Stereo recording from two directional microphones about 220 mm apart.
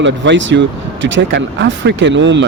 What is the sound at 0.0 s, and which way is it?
Speech, 55° right (ahead or behind).